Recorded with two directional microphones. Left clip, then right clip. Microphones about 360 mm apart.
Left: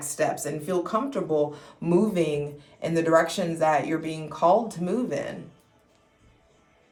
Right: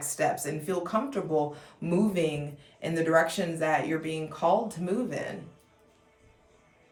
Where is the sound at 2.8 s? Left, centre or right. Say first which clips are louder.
Left 3 dB; centre.